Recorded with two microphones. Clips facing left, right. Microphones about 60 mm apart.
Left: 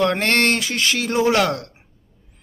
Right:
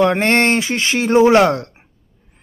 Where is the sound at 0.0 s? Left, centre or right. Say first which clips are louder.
Right 4 dB; right.